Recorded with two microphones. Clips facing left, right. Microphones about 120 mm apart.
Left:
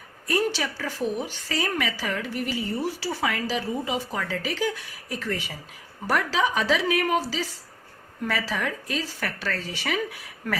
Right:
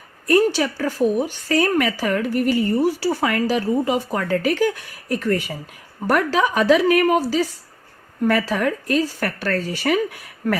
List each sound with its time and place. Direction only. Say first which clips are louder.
0.3 s a woman's voice: right 8 dB; 50° right (ahead or behind)